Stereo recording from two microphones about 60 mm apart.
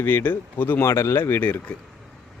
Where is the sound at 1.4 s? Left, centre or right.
Left.